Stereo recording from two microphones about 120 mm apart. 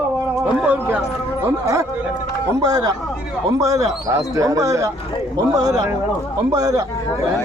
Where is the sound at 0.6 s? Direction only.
10° right (ahead or behind).